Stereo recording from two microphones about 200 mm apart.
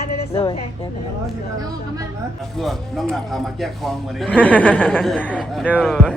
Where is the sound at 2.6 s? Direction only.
Centre (ahead or behind).